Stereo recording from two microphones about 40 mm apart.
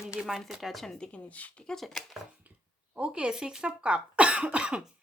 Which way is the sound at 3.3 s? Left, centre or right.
Centre.